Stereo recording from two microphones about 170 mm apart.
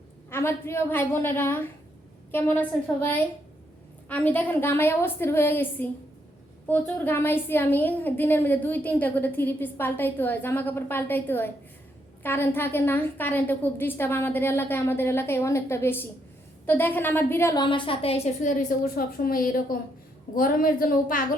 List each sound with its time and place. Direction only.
0.3 s a woman's voice: 15° left (ahead or behind); by 18.3 s 35° left (ahead or behind)
18.4 s a woman's voice: 55° left (ahead or behind)